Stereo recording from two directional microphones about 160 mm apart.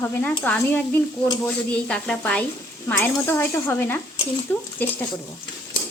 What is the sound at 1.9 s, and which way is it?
A woman's voice, 5° left (ahead or behind).